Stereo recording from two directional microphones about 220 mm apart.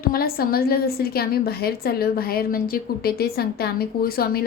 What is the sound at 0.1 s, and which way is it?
A woman's voice, 45° left (ahead or behind).